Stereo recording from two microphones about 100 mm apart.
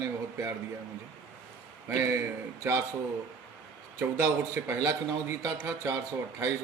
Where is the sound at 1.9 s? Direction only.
30° right (ahead or behind).